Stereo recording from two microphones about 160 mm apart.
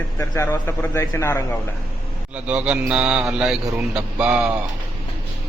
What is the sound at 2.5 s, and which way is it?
Speech, 5° right (ahead or behind).